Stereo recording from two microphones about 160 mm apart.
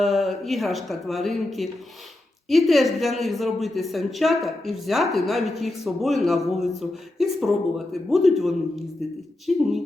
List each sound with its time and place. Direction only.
0.0 s a woman's voice: centre (ahead or behind)